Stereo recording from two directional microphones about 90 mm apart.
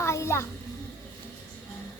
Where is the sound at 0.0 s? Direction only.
30° left (ahead or behind).